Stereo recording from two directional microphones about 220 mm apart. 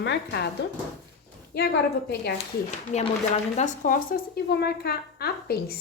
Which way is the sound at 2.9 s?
30° left (ahead or behind).